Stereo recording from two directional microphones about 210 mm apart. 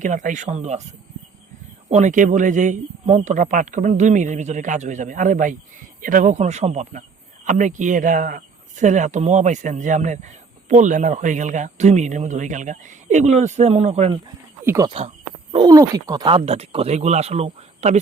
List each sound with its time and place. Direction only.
0.0 s speech: 35° right (ahead or behind)
1.9 s speech: 35° right (ahead or behind)
14.6 s speech: 15° right (ahead or behind); by 18.0 s 30° right (ahead or behind)